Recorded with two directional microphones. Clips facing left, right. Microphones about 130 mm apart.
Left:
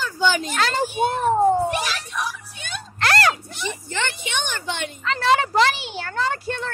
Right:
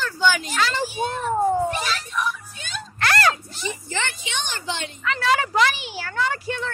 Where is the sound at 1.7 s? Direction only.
80° left; by 2.8 s 65° left (ahead or behind).